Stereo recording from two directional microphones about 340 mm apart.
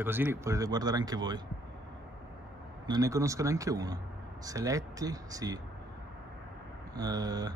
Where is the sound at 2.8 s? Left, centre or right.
Centre.